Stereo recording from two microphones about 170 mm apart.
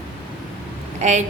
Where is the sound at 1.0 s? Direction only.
45° right (ahead or behind).